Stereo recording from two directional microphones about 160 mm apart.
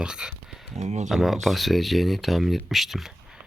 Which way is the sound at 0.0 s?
5° right (ahead or behind).